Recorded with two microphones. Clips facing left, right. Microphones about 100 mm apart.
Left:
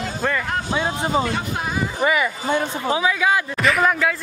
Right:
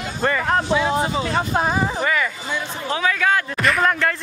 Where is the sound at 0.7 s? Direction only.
40° left (ahead or behind).